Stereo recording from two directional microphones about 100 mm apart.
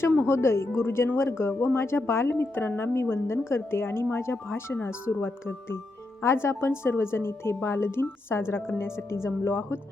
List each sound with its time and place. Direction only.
0.3 s speech: 25° left (ahead or behind)